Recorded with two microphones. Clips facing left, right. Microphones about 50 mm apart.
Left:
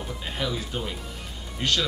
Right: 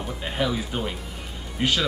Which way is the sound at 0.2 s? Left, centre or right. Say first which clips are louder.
Right 5 dB; centre.